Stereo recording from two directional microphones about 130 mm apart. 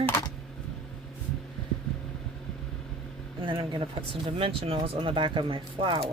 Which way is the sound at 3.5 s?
40° right (ahead or behind).